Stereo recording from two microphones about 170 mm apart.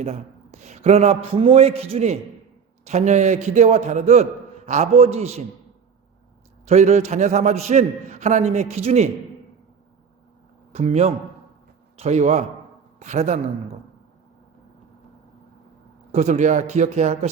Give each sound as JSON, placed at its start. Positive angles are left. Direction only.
{"t": 0.0, "sound": "a man's voice", "side_deg": -40}
{"t": 6.7, "sound": "a man's voice", "side_deg": -40}
{"t": 10.7, "sound": "a man's voice", "side_deg": -40}
{"t": 16.1, "sound": "speech", "side_deg": -45}